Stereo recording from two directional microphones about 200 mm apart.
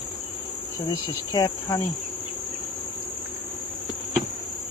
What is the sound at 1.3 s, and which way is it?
Cricket, 15° left (ahead or behind).